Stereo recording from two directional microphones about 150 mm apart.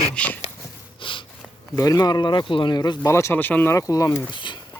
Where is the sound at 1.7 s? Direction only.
20° left (ahead or behind).